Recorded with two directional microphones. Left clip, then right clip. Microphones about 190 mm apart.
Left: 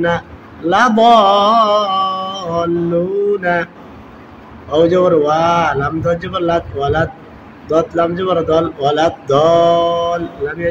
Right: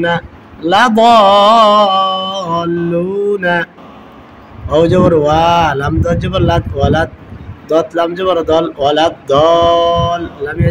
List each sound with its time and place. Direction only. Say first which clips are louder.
0.7 s a man's voice: right 2 dB; 40° right (ahead or behind)